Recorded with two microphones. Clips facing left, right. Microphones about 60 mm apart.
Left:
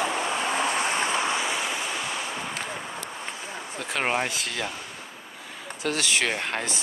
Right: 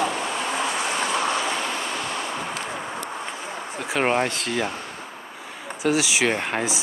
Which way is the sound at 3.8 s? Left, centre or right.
Centre.